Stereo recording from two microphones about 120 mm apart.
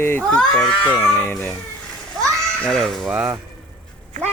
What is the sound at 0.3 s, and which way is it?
Speech, 5° left (ahead or behind).